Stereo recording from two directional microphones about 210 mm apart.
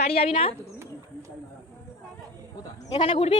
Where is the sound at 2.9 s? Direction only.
25° left (ahead or behind).